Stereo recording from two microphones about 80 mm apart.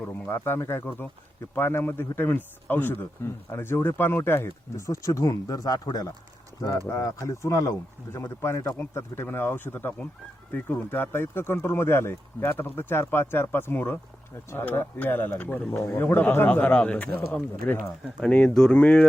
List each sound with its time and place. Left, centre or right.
0.1 s speech: left; by 19.0 s centre